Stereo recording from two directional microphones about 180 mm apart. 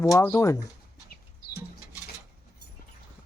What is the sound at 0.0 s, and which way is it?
Speech, 15° left (ahead or behind).